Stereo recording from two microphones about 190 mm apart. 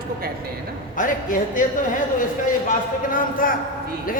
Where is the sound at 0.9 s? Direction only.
45° left (ahead or behind).